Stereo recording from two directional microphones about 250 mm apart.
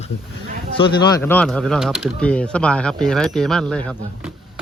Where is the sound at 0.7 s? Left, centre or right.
Centre.